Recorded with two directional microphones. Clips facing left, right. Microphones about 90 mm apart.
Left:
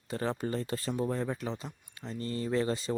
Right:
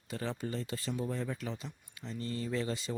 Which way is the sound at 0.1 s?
40° left (ahead or behind).